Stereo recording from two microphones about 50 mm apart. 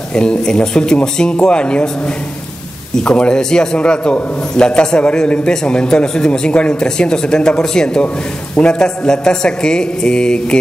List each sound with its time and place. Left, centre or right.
0.1 s a man's voice: centre
3.0 s a man's voice: centre